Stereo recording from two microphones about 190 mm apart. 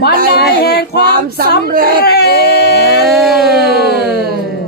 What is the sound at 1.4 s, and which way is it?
Speech, 50° right (ahead or behind).